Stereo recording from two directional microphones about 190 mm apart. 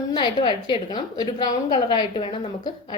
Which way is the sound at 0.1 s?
25° left (ahead or behind).